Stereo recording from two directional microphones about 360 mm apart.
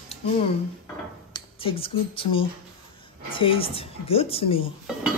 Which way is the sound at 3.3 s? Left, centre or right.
Centre.